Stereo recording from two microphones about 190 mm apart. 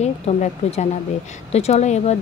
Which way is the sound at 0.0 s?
35° left (ahead or behind).